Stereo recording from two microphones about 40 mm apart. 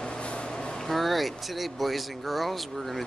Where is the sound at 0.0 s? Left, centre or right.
Left.